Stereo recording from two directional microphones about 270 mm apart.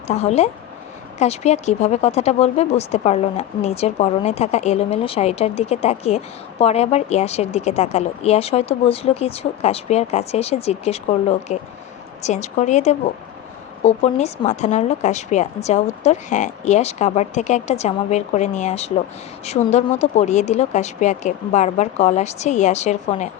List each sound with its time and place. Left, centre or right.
0.1 s speech: left